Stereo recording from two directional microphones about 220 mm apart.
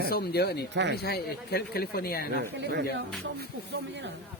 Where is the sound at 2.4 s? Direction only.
45° right (ahead or behind).